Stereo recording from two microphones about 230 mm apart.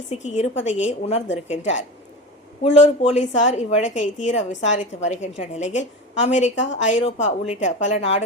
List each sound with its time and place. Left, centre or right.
0.1 s a woman's voice: left
2.7 s a woman's voice: left